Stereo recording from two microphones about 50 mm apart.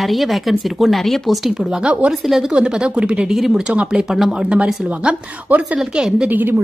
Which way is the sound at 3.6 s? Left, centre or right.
Right.